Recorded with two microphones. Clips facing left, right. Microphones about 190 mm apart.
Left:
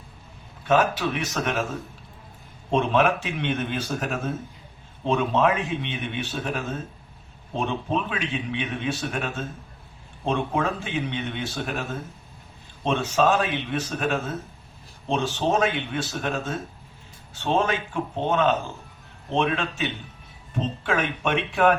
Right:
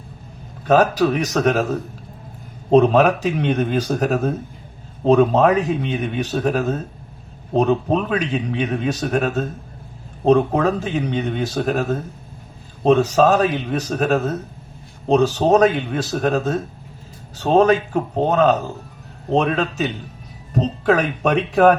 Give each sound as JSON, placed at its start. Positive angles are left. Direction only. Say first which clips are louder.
{"t": 0.7, "sound": "a man's voice", "louder": "right 7 dB", "side_deg": -40}